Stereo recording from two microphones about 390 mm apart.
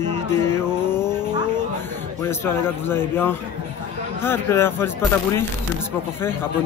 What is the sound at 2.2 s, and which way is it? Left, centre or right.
Speech, centre.